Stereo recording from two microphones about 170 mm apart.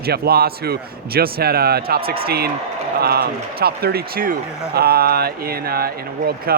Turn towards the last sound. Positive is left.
turn(degrees=-65)  # may be behind; listen again after turning